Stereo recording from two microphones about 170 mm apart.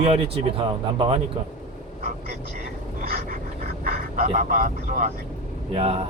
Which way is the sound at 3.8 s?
55° right (ahead or behind).